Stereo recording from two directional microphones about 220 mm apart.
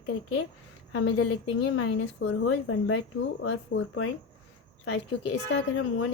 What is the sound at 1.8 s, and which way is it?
A woman's voice, 65° left (ahead or behind).